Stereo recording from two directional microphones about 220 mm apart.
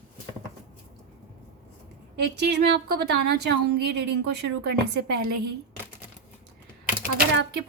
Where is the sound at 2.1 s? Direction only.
50° right (ahead or behind).